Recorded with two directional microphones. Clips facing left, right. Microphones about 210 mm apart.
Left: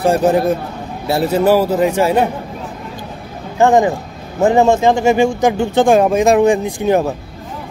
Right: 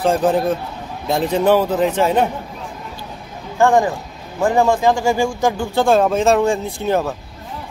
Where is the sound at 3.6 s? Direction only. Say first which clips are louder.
Left 3 dB; 20° left (ahead or behind).